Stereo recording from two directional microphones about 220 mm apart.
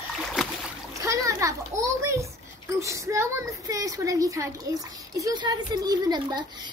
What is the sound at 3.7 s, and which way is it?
Speech, 15° right (ahead or behind).